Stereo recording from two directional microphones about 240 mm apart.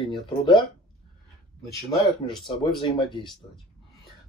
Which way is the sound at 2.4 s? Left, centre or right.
Centre.